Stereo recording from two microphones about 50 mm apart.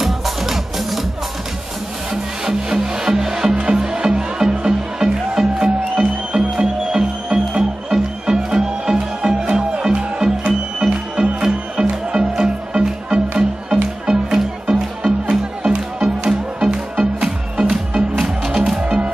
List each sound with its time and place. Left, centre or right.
0.0 s music: centre
2.4 s music: centre